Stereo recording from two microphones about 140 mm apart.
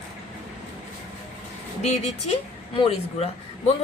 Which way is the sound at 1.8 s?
50° left (ahead or behind).